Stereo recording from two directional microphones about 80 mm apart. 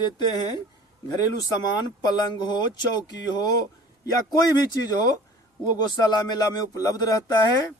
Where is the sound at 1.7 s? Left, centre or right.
Left.